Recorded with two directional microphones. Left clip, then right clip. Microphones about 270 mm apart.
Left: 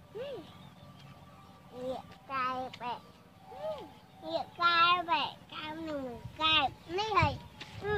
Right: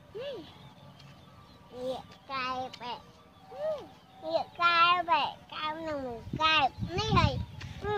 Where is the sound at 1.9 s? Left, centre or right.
Right.